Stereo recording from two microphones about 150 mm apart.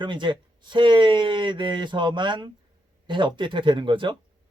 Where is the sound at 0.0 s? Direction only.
30° right (ahead or behind).